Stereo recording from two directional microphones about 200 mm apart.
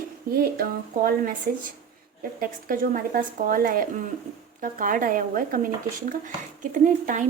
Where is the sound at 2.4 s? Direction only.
45° right (ahead or behind).